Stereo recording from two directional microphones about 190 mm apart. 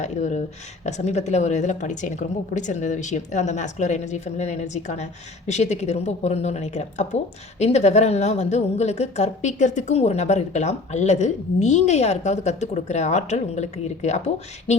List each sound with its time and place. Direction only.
0.0 s a woman's voice: 40° left (ahead or behind)